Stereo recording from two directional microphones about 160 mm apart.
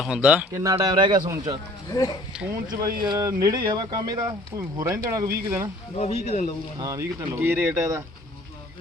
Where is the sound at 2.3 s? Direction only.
5° right (ahead or behind).